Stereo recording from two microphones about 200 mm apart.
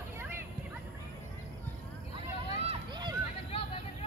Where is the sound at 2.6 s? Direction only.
25° right (ahead or behind).